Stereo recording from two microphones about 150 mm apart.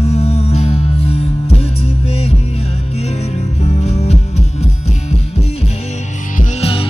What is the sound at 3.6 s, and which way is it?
Music, 45° left (ahead or behind).